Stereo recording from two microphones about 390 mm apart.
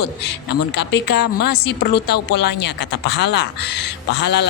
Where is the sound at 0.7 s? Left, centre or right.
Left.